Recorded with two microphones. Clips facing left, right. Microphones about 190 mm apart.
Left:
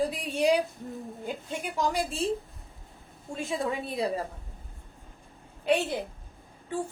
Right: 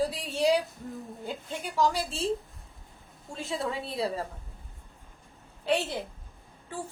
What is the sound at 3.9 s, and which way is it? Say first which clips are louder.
Speech: left 1 dB; 15° left (ahead or behind).